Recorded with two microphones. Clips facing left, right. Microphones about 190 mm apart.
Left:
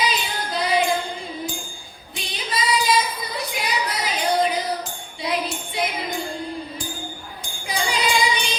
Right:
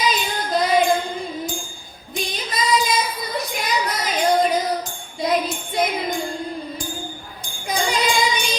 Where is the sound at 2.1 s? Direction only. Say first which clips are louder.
Right 3 dB; 45° right (ahead or behind).